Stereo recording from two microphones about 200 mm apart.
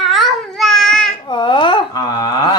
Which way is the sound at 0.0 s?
Centre (ahead or behind).